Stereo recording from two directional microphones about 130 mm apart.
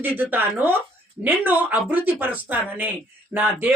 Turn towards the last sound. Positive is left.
turn(degrees=-15)  # may be behind; listen again after turning